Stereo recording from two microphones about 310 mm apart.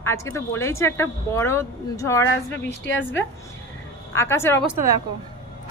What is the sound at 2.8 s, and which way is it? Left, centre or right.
Speech, left.